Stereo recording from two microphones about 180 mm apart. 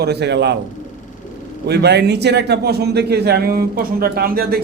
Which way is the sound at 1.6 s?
65° right (ahead or behind).